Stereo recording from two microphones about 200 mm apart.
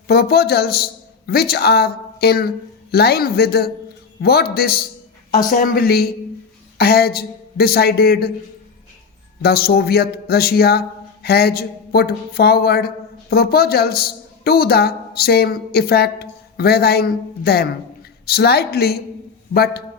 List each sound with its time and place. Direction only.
0.1 s a woman's voice: 50° left (ahead or behind)
9.4 s a woman's voice: 50° left (ahead or behind)